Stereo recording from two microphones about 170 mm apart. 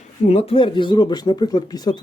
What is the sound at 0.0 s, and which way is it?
Speech, 40° left (ahead or behind).